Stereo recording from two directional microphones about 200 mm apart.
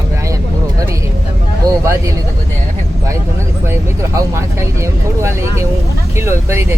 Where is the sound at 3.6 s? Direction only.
15° right (ahead or behind).